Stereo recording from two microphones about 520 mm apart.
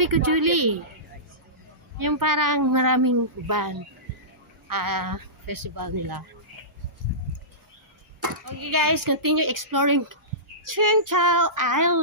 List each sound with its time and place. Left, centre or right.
0.0 s speech: right
2.0 s speech: right
8.2 s speech: right